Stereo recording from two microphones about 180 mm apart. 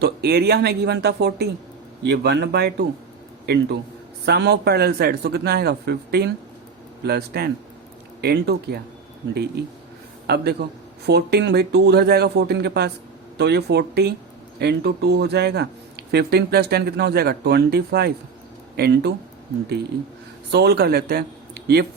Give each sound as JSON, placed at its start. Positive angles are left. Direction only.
{"t": 0.0, "sound": "a man's voice", "side_deg": -60}
{"t": 10.2, "sound": "speech", "side_deg": -65}
{"t": 20.5, "sound": "speech", "side_deg": -65}